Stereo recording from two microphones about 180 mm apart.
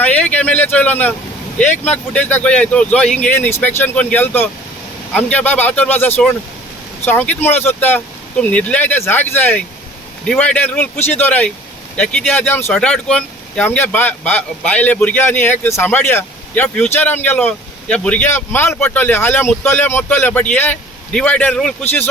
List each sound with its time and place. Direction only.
0.0 s speech: 10° left (ahead or behind)